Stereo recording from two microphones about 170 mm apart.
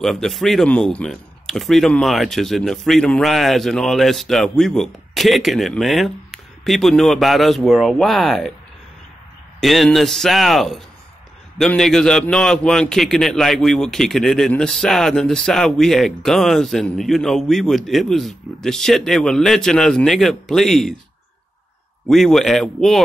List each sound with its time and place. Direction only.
0.0 s a man's voice: centre (ahead or behind)
9.6 s a man's voice: centre (ahead or behind)
22.0 s a man's voice: centre (ahead or behind)